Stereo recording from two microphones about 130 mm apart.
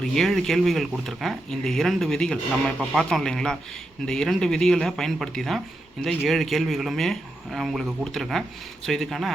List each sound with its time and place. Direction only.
0.0 s speech: 5° left (ahead or behind)